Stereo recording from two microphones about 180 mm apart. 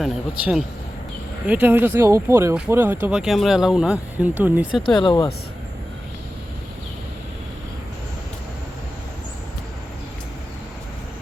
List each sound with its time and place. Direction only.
0.0 s speech: centre (ahead or behind)
4.9 s speech: 25° left (ahead or behind)